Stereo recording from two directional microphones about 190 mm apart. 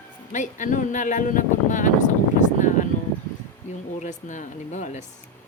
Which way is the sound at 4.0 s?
40° left (ahead or behind).